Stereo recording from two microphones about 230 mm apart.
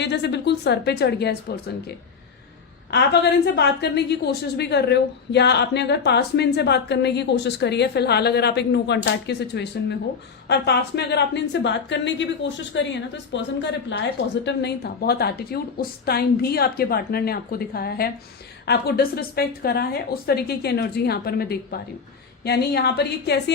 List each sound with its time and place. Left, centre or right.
0.0 s a woman's voice: left